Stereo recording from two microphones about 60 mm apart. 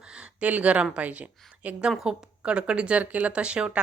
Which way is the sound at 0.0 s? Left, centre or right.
Centre.